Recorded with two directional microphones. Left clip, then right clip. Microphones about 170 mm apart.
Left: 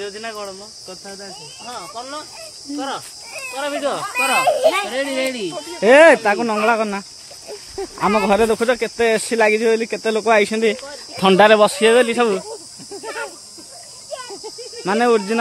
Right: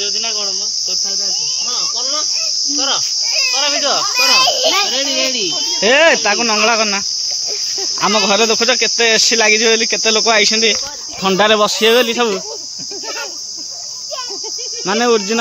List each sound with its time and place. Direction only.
0.0 s cricket: 15° left (ahead or behind)
2.8 s speech: 45° left (ahead or behind)
3.5 s speech: 35° left (ahead or behind)
4.1 s a child's voice: 50° left (ahead or behind)
4.9 s speech: 20° left (ahead or behind)
5.8 s speech: 5° left (ahead or behind)
14.9 s speech: 10° right (ahead or behind)